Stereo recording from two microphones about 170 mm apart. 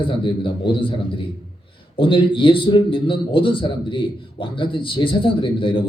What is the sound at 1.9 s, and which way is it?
A man's voice, 30° left (ahead or behind).